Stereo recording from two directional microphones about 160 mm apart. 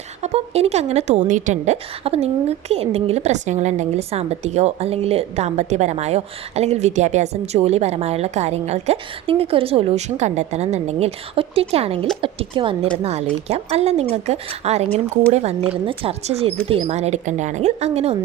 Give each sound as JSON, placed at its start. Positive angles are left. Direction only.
{"t": 0.2, "sound": "a woman's voice", "side_deg": -40}